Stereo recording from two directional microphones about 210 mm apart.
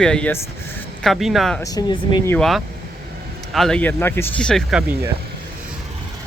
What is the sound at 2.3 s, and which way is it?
Speech, centre (ahead or behind).